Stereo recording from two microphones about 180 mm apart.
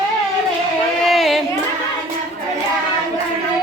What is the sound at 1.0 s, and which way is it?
Child singing, centre (ahead or behind).